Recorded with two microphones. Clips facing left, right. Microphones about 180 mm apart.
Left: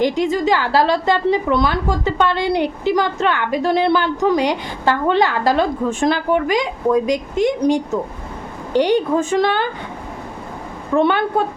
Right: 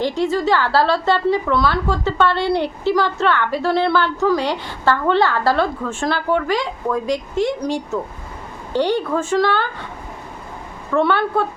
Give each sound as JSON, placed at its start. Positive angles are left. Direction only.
{"t": 0.0, "sound": "a woman's voice", "side_deg": 15}
{"t": 10.9, "sound": "a woman's voice", "side_deg": 15}